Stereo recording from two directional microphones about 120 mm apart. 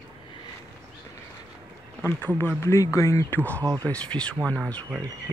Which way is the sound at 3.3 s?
15° left (ahead or behind).